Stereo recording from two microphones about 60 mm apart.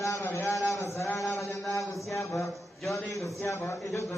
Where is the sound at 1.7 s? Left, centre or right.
Left.